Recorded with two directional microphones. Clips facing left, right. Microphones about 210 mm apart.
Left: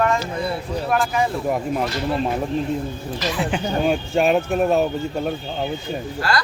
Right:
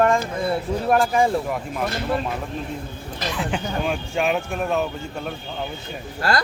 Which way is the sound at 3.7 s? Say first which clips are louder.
Left 5 dB; 40° left (ahead or behind).